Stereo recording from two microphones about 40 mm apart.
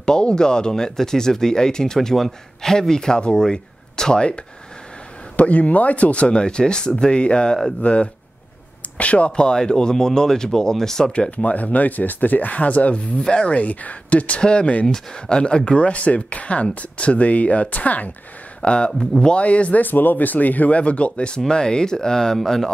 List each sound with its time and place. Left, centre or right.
0.0 s speech: left
5.3 s speech: left
9.5 s speech: centre
11.1 s speech: left
13.2 s speech: left
18.6 s speech: left
18.9 s speech: centre
19.3 s speech: left
19.8 s speech: left; by 22.7 s centre